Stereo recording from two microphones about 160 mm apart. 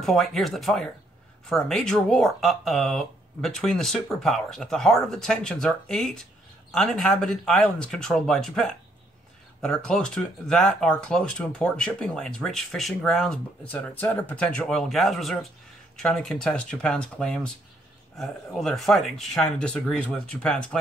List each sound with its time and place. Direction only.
0.0 s speech: centre (ahead or behind)